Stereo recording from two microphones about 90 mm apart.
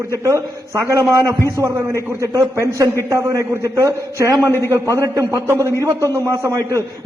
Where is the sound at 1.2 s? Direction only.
40° right (ahead or behind).